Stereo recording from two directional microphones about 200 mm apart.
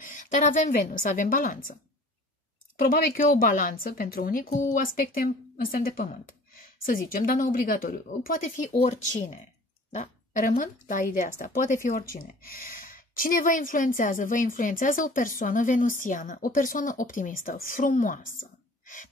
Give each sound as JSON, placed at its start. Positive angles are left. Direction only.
{"t": 0.0, "sound": "speech", "side_deg": 40}
{"t": 2.8, "sound": "speech", "side_deg": 45}